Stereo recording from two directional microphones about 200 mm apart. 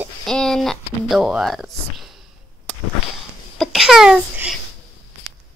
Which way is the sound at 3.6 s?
Centre (ahead or behind).